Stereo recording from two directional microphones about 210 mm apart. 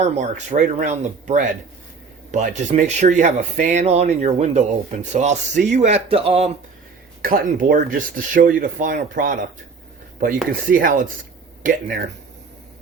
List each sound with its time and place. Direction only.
0.0 s speech: 35° right (ahead or behind)
7.2 s speech: 45° right (ahead or behind)